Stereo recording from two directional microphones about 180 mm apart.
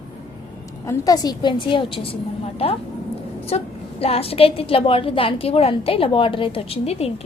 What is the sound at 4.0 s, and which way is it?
A woman's voice, 35° left (ahead or behind).